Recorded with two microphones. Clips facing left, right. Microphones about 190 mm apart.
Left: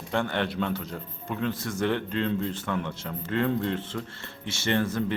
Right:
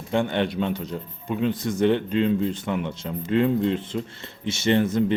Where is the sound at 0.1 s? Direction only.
20° right (ahead or behind).